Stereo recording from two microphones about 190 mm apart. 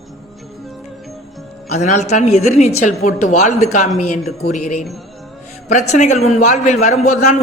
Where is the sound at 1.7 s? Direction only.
40° left (ahead or behind).